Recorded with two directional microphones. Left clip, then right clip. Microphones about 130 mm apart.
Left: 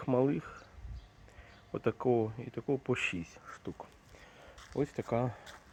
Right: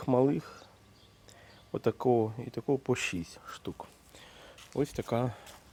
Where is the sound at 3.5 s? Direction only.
40° right (ahead or behind).